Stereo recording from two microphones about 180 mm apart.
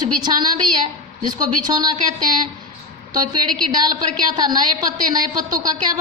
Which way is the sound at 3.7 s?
25° right (ahead or behind).